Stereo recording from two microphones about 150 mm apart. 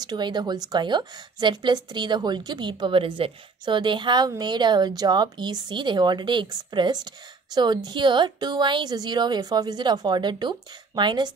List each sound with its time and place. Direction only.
0.0 s speech: 30° right (ahead or behind)